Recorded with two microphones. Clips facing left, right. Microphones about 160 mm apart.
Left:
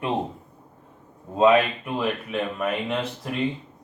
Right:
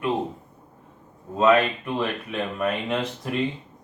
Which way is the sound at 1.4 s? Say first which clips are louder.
Left 1 dB; 10° left (ahead or behind).